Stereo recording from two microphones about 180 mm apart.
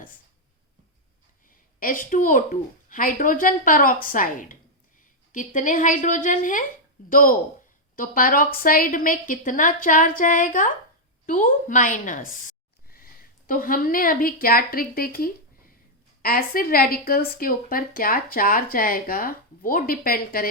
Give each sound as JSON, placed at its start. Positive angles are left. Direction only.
{"t": 1.5, "sound": "speech", "side_deg": 50}